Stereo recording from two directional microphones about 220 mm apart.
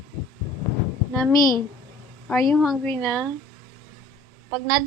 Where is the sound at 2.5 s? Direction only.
Centre (ahead or behind).